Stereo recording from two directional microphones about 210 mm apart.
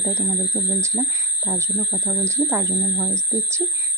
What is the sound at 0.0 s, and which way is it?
Speech, 15° right (ahead or behind).